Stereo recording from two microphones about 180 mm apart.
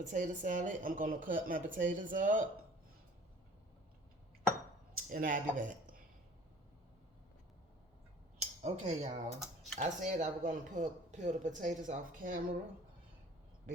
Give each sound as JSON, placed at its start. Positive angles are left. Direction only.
{"t": 0.0, "sound": "speech", "side_deg": -45}
{"t": 4.9, "sound": "speech", "side_deg": -55}
{"t": 8.4, "sound": "speech", "side_deg": -40}